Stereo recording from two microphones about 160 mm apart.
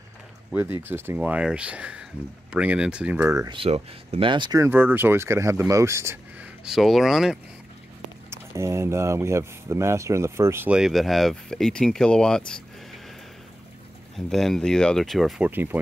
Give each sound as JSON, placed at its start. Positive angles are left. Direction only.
{"t": 0.5, "sound": "speech", "side_deg": -15}
{"t": 3.5, "sound": "speech", "side_deg": -40}
{"t": 6.6, "sound": "speech", "side_deg": 0}
{"t": 8.3, "sound": "speech", "side_deg": -15}
{"t": 14.1, "sound": "speech", "side_deg": 0}